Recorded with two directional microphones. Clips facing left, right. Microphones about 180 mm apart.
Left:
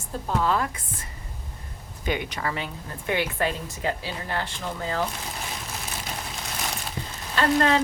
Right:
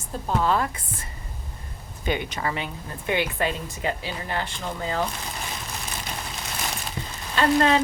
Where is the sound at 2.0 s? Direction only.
25° right (ahead or behind).